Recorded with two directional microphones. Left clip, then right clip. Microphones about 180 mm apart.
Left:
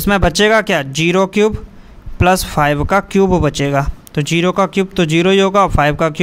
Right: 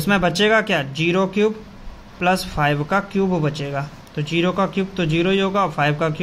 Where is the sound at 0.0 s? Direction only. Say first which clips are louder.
Left 5 dB; 55° left (ahead or behind).